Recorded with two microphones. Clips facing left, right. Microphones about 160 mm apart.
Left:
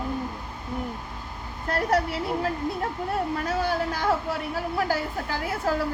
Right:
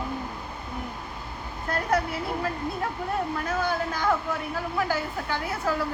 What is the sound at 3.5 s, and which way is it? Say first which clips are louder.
A woman's voice: left 1 dB; 35° left (ahead or behind).